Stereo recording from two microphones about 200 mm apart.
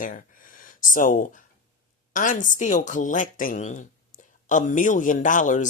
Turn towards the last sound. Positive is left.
turn(degrees=40)  # may be behind; listen again after turning